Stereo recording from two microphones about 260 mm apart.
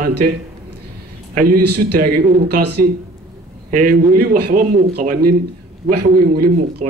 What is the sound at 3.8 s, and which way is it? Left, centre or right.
A man's voice, right.